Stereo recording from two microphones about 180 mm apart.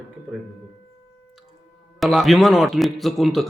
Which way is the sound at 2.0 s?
Centre (ahead or behind).